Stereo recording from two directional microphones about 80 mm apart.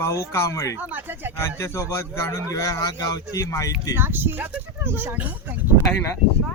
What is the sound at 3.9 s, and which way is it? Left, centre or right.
Speech, right.